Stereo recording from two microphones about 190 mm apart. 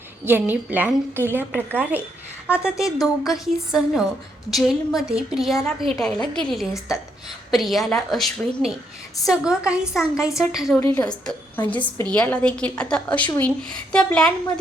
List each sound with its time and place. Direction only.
0.3 s a woman's voice: 10° right (ahead or behind)
6.7 s a woman's voice: 15° left (ahead or behind)
7.5 s a woman's voice: centre (ahead or behind)